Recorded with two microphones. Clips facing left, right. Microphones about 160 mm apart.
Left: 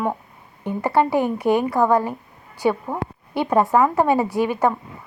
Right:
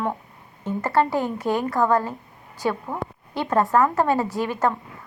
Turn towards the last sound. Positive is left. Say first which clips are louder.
# left 4 dB
turn(degrees=15)  # may be behind; listen again after turning